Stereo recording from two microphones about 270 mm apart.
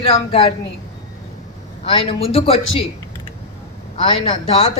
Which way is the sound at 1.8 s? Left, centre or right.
Centre.